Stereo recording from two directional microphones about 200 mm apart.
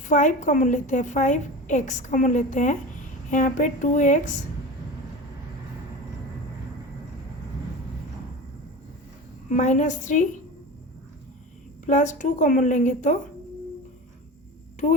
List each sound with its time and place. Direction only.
0.1 s a woman's voice: 40° left (ahead or behind)
9.5 s a woman's voice: 35° left (ahead or behind)
11.9 s a woman's voice: 40° left (ahead or behind)